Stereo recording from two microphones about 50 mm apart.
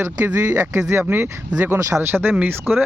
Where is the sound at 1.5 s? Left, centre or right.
Right.